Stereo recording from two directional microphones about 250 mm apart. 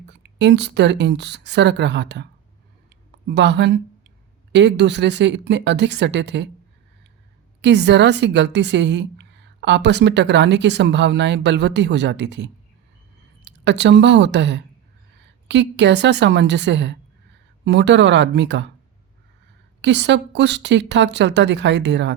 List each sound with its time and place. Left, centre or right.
0.1 s a woman's voice: right
3.2 s a woman's voice: right
7.6 s a woman's voice: right
19.8 s a woman's voice: right